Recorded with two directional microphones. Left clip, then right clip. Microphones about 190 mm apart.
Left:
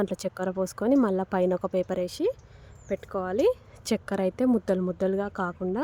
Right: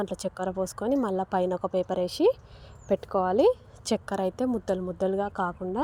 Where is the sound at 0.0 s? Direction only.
20° left (ahead or behind).